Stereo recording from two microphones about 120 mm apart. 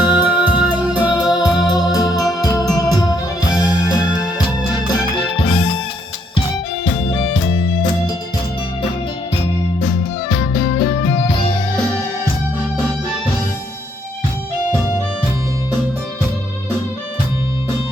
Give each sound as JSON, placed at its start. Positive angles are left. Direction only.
{"t": 0.0, "sound": "music", "side_deg": 35}
{"t": 4.9, "sound": "music", "side_deg": 45}
{"t": 7.1, "sound": "music", "side_deg": 45}
{"t": 10.4, "sound": "music", "side_deg": 40}